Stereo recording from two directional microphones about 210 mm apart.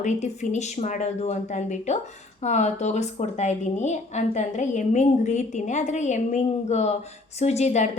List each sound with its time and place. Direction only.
0.0 s a woman's voice: 35° left (ahead or behind)